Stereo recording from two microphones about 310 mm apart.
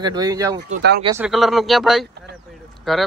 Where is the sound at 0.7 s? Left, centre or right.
Right.